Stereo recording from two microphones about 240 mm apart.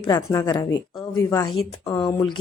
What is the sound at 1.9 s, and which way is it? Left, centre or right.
Speech, centre.